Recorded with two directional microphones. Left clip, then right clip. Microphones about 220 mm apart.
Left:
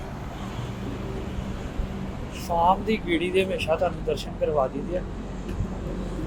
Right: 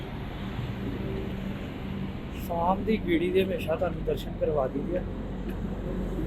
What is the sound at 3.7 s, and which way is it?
Speech, 10° left (ahead or behind).